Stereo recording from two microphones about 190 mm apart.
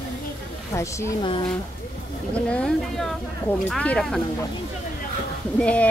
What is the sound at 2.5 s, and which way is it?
Speech, 5° left (ahead or behind).